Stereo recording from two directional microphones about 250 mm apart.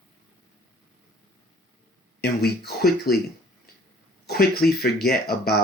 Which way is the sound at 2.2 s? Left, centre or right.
Left.